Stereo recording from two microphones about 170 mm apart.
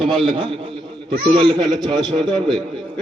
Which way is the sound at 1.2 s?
30° right (ahead or behind).